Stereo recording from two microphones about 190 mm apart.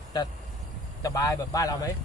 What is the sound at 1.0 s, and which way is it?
Speech, 20° left (ahead or behind).